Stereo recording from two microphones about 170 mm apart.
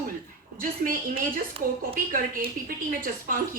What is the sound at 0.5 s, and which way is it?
Speech, 55° right (ahead or behind).